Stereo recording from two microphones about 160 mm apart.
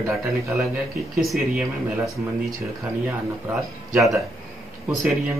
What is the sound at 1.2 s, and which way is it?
Speech, centre (ahead or behind).